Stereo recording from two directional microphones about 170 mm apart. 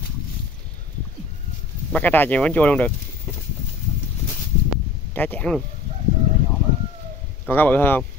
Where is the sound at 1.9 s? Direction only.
10° left (ahead or behind).